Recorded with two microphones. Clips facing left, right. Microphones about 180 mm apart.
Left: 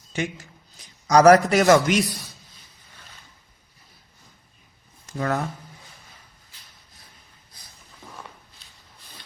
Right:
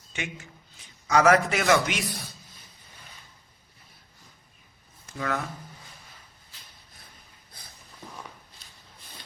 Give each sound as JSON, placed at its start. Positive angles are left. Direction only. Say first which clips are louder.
{"t": 0.1, "sound": "a man's voice", "louder": "left 8 dB", "side_deg": 35}
{"t": 5.0, "sound": "speech", "louder": "left 5 dB", "side_deg": 40}